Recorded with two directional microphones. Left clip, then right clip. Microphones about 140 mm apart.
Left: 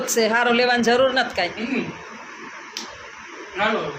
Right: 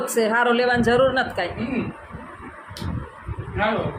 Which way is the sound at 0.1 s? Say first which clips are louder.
Left 1 dB; 5° left (ahead or behind).